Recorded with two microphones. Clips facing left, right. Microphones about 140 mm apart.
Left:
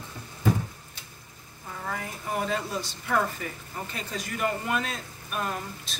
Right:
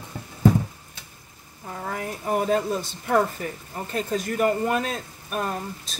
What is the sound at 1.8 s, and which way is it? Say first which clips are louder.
A woman's voice: right 4 dB; 45° right (ahead or behind).